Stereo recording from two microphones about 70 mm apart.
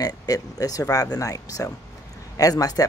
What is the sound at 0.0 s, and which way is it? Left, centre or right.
Speech, left.